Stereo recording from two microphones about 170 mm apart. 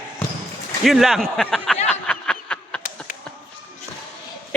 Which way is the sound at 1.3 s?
5° left (ahead or behind).